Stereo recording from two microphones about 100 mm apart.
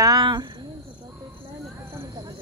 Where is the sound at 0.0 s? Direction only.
45° right (ahead or behind).